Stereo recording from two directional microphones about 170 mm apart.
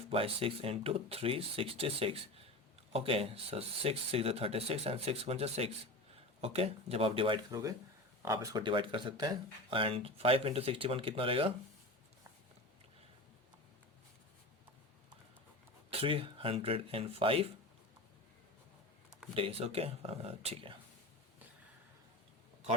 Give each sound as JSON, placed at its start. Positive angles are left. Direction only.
{"t": 0.1, "sound": "speech", "side_deg": -35}
{"t": 15.9, "sound": "speech", "side_deg": -35}
{"t": 19.3, "sound": "speech", "side_deg": -35}